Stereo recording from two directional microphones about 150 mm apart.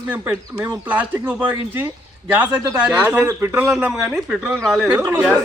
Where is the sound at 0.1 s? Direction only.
15° right (ahead or behind).